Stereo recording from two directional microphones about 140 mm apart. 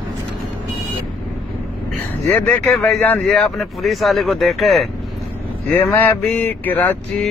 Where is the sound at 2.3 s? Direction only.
10° left (ahead or behind).